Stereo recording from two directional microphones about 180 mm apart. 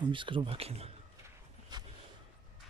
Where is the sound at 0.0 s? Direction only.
25° right (ahead or behind).